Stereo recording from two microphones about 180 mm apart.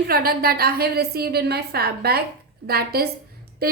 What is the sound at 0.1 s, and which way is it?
A woman's voice, 55° right (ahead or behind).